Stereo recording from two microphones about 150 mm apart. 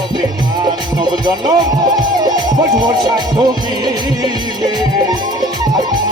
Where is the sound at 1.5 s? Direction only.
30° right (ahead or behind).